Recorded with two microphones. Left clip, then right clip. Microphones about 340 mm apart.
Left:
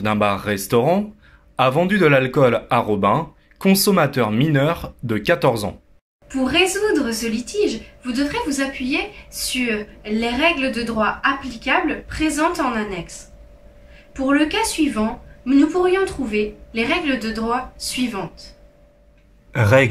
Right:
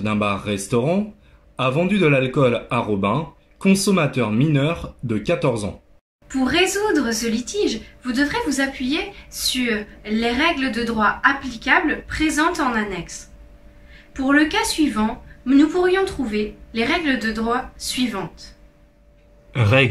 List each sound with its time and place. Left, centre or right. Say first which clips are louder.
0.0 s speech: left 3 dB; left
6.2 s speech: left 1 dB; centre
14.1 s speech: right 1 dB; centre
19.5 s speech: left 2 dB; centre